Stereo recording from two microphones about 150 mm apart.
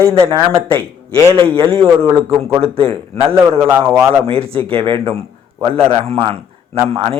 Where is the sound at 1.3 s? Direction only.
35° right (ahead or behind).